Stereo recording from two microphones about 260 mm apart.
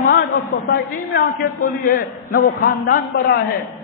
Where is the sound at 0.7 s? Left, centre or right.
Left.